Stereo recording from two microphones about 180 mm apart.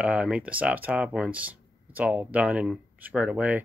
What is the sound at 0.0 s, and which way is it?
Speech, 5° right (ahead or behind).